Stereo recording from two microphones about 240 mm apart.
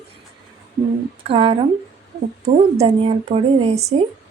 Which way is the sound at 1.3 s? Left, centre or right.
Right.